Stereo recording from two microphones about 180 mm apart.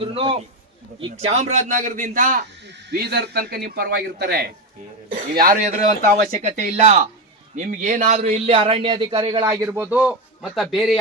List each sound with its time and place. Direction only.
0.0 s a man's voice: 30° right (ahead or behind); by 2.4 s 50° right (ahead or behind)
2.6 s a man's voice: 60° right (ahead or behind); by 10.9 s centre (ahead or behind)